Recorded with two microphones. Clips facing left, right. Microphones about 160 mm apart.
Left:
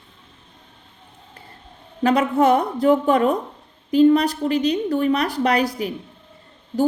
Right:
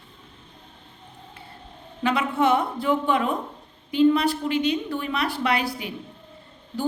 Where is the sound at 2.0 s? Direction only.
40° left (ahead or behind).